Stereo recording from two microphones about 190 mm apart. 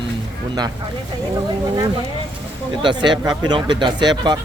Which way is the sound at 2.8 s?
25° right (ahead or behind).